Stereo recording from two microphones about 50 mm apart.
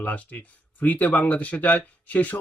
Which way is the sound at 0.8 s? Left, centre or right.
Left.